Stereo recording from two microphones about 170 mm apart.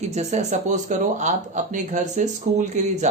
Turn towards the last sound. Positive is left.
turn(degrees=-45)  # may be behind; listen again after turning